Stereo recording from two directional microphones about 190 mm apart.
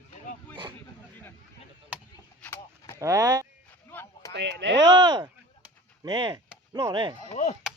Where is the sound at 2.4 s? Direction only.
10° left (ahead or behind).